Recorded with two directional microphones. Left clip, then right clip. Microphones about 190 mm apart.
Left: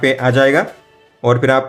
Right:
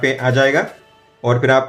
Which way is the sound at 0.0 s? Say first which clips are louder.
Left 2 dB; 35° left (ahead or behind).